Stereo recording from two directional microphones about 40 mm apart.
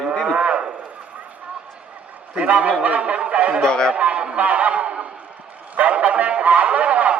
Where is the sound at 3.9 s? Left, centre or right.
Right.